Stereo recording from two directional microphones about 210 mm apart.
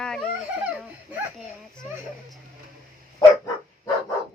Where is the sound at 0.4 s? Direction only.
5° right (ahead or behind).